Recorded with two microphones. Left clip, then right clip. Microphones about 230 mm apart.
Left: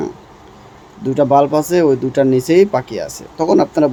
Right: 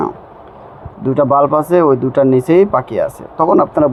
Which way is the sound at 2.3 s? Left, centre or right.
Centre.